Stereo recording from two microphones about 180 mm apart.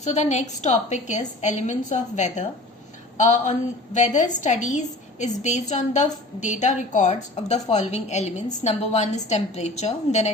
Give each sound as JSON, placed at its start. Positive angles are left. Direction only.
{"t": 0.0, "sound": "a woman's voice", "side_deg": 40}